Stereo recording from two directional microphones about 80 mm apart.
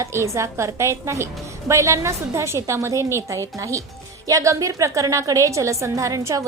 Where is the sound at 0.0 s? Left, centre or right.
Right.